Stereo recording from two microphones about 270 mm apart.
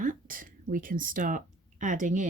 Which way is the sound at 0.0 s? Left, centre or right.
Right.